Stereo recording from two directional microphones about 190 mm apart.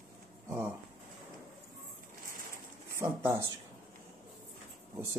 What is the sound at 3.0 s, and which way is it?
Speech, 15° right (ahead or behind).